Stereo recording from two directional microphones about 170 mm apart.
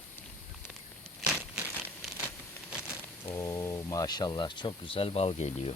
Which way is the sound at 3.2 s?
20° left (ahead or behind).